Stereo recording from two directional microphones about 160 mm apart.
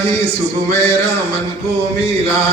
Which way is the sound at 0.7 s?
40° right (ahead or behind).